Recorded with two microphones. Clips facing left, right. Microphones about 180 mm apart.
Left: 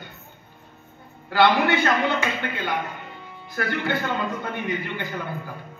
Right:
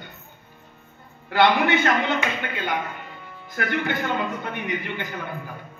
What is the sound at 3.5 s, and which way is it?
A man's voice, 20° right (ahead or behind).